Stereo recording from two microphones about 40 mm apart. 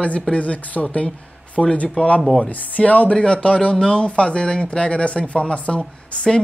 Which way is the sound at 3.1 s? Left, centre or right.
Left.